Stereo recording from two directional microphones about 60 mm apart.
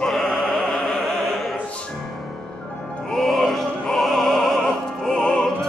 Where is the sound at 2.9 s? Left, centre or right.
Centre.